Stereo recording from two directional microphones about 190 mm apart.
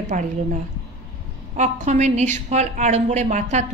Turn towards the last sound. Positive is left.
turn(degrees=-40)  # may be behind; listen again after turning